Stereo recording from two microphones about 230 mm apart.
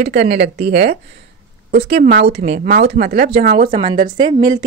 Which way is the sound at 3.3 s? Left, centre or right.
Right.